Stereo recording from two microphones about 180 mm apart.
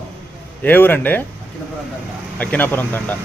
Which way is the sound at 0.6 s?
10° left (ahead or behind).